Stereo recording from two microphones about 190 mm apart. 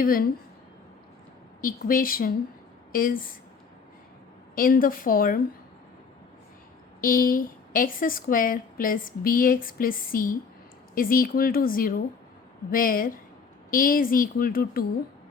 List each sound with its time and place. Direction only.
0.0 s a woman's voice: 50° left (ahead or behind)
1.6 s a woman's voice: 50° left (ahead or behind)
4.5 s a woman's voice: 45° left (ahead or behind)
7.0 s a woman's voice: 45° left (ahead or behind)